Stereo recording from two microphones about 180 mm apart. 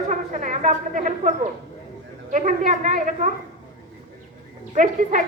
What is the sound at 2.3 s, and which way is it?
A child's voice, 45° right (ahead or behind).